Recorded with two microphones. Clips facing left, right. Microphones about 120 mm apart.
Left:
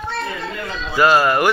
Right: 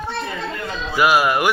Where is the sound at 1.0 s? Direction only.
10° right (ahead or behind).